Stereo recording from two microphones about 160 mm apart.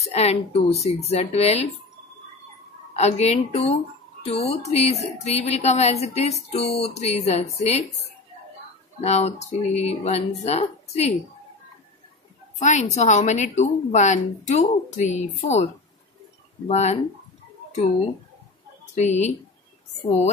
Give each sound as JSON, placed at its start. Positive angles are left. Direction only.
{"t": 0.0, "sound": "speech", "side_deg": 40}
{"t": 3.0, "sound": "a woman's voice", "side_deg": 45}
{"t": 9.0, "sound": "a woman's voice", "side_deg": 45}
{"t": 12.5, "sound": "a woman's voice", "side_deg": 50}
{"t": 18.9, "sound": "a woman's voice", "side_deg": 45}